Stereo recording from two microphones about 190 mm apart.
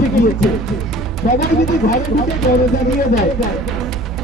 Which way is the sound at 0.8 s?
Centre (ahead or behind).